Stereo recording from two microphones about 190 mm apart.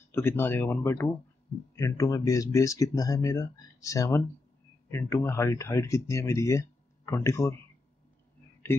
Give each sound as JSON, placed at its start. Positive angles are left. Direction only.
{"t": 0.1, "sound": "speech", "side_deg": 10}